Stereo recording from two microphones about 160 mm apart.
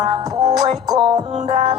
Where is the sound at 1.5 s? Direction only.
40° right (ahead or behind).